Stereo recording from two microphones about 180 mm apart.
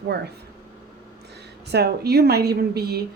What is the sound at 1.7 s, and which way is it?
A woman's voice, 65° right (ahead or behind).